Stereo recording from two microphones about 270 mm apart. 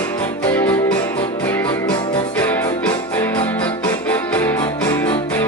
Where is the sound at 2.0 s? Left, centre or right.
Centre.